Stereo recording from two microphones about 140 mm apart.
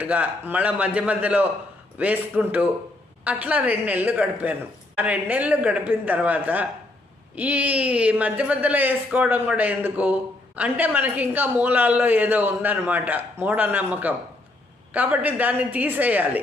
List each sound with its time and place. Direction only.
0.0 s a man's voice: 10° right (ahead or behind)